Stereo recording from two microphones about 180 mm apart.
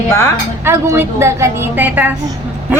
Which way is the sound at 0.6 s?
15° right (ahead or behind).